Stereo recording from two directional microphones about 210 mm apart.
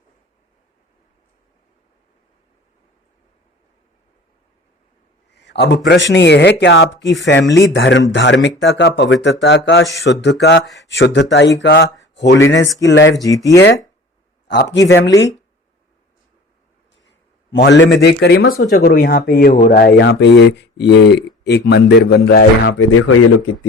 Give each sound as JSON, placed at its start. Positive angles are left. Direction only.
{"t": 5.3, "sound": "speech", "side_deg": 55}
{"t": 13.2, "sound": "speech", "side_deg": 15}
{"t": 14.4, "sound": "speech", "side_deg": 55}
{"t": 17.1, "sound": "speech", "side_deg": 55}
{"t": 22.9, "sound": "speech", "side_deg": 90}